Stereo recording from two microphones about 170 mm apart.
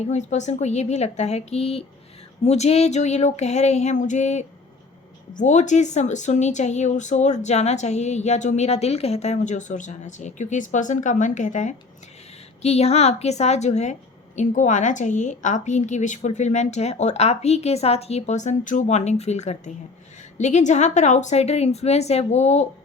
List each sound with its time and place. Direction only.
0.1 s a woman's voice: 45° left (ahead or behind)